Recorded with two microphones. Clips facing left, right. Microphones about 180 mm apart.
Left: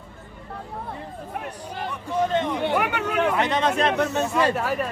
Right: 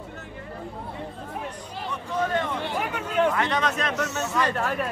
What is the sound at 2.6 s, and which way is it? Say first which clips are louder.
Speech: left 6 dB; 70° left (ahead or behind).